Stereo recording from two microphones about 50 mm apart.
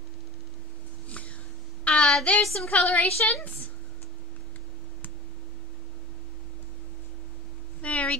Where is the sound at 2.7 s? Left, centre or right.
Left.